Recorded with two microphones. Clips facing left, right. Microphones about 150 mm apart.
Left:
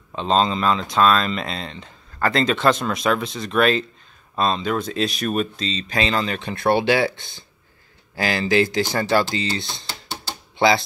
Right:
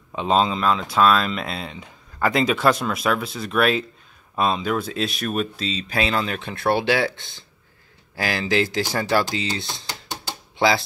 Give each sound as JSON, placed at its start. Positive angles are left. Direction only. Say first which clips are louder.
{"t": 0.1, "sound": "speech", "louder": "even", "side_deg": -10}